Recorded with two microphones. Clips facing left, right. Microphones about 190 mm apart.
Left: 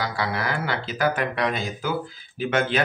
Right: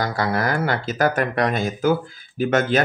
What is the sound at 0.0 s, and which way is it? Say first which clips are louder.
Speech: right 5 dB; 45° right (ahead or behind).